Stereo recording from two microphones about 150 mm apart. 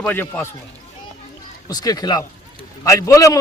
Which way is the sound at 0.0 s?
10° left (ahead or behind).